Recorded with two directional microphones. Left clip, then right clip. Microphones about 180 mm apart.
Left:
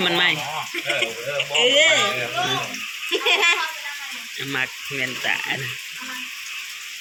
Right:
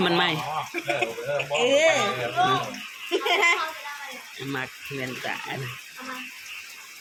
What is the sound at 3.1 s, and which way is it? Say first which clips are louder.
Bathtub: left 3 dB; 25° right (ahead or behind).